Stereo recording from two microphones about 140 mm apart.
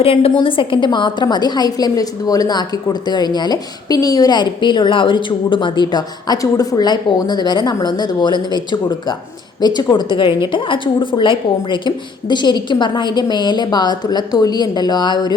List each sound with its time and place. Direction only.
0.0 s a woman's voice: 45° left (ahead or behind)